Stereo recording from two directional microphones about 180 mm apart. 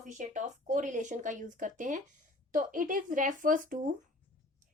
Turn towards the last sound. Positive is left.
turn(degrees=-50)  # may be behind; listen again after turning